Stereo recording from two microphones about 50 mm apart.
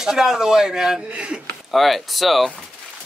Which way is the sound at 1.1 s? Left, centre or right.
Right.